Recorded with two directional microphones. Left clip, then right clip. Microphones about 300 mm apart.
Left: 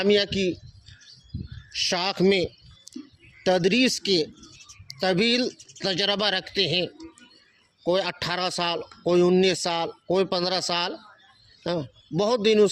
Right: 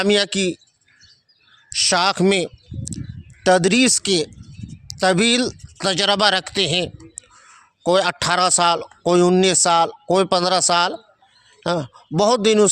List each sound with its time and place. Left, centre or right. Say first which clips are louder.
0.0 s speech: right 4 dB; right
1.7 s a sound: right 8 dB; right
3.4 s speech: right 6 dB; right